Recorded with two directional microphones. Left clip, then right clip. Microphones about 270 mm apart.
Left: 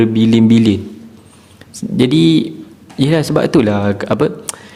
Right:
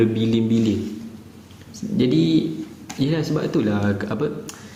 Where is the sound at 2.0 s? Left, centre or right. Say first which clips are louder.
Left 7 dB; left.